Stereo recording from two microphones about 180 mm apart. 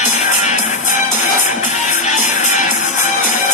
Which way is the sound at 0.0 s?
40° left (ahead or behind).